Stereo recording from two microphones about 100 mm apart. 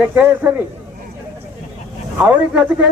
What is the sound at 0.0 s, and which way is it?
Speech, 20° right (ahead or behind).